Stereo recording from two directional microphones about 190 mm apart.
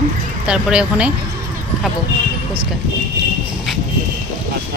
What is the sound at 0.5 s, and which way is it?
Speech, 5° right (ahead or behind).